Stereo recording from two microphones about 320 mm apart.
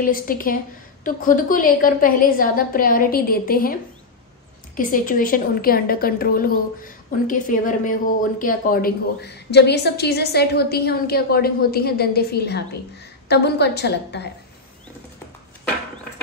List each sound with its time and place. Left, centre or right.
0.0 s a woman's voice: left